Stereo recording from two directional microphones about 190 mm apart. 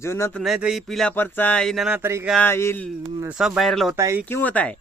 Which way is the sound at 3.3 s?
5° right (ahead or behind).